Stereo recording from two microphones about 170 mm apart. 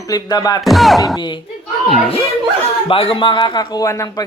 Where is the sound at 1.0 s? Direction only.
25° left (ahead or behind).